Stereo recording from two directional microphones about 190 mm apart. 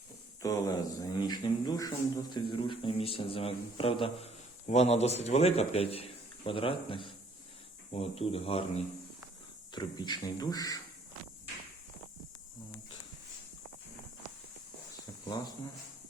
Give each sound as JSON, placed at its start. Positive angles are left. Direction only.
{"t": 0.4, "sound": "a man's voice", "side_deg": 20}
{"t": 9.7, "sound": "a man's voice", "side_deg": 20}
{"t": 15.3, "sound": "a man's voice", "side_deg": 20}